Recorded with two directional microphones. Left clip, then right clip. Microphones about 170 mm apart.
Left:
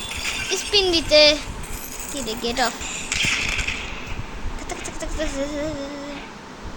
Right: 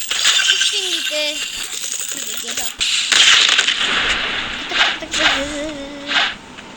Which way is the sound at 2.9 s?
30° right (ahead or behind).